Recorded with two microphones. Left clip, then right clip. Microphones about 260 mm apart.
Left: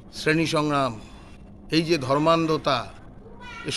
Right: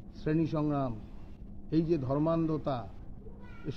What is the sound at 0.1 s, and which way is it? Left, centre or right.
Speech, centre.